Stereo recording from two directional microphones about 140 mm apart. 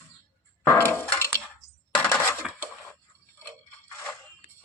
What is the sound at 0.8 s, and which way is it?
Speech, 15° left (ahead or behind).